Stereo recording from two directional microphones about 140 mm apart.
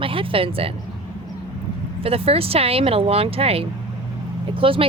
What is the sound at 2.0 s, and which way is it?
Speech, 45° right (ahead or behind).